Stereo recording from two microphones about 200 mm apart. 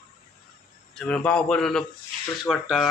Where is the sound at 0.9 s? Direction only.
5° left (ahead or behind).